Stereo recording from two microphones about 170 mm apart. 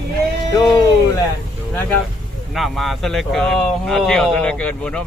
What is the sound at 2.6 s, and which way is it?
Speech, centre (ahead or behind).